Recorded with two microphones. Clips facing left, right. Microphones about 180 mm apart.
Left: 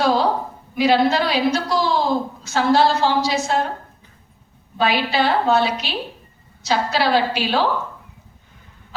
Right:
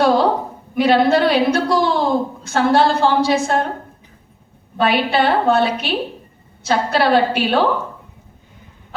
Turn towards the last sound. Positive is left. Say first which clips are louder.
# right 4 dB
turn(degrees=-55)  # may be behind; listen again after turning